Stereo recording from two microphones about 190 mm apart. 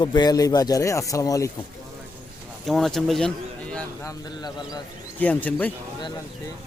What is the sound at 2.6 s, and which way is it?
Speech, centre (ahead or behind).